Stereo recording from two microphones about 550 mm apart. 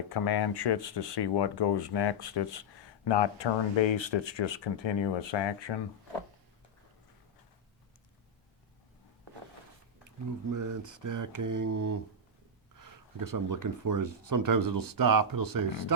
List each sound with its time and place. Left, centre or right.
0.1 s speech: left
10.5 s speech: right